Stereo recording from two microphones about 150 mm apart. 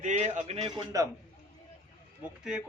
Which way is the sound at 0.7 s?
25° right (ahead or behind).